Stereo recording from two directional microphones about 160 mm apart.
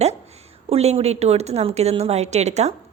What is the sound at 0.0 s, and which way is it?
Speech, 40° right (ahead or behind).